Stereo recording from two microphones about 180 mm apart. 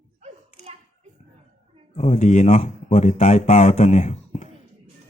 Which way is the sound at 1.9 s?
40° left (ahead or behind).